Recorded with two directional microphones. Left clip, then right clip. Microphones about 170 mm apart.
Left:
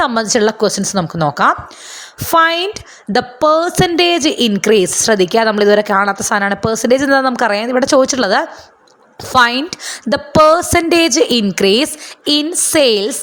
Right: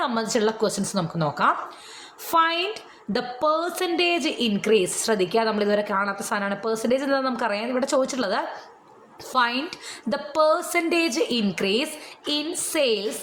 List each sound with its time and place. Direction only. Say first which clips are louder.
0.0 s a woman's voice: left 10 dB; 50° left (ahead or behind)